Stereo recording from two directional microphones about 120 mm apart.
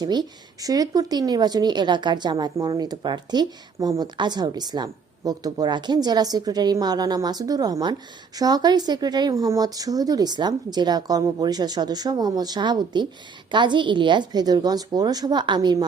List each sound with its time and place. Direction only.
0.0 s speech: 35° right (ahead or behind)